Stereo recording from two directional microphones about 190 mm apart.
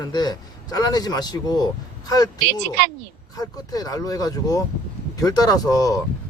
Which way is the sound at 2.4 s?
60° right (ahead or behind).